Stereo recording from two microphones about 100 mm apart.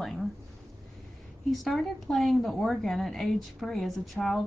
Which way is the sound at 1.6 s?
Centre (ahead or behind).